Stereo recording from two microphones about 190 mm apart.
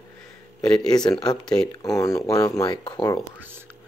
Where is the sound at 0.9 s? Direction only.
20° left (ahead or behind).